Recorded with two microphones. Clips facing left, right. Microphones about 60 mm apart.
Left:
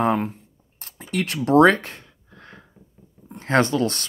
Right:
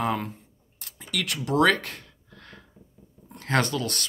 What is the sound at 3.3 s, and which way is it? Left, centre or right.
Speech, left.